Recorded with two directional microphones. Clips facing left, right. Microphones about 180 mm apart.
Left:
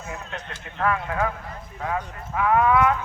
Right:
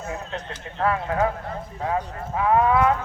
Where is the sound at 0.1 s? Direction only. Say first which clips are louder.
Right 1 dB; 30° right (ahead or behind).